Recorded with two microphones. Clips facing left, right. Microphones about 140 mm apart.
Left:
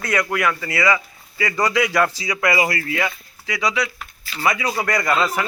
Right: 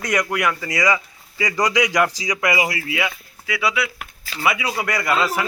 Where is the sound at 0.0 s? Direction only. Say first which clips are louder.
Even; 15° right (ahead or behind).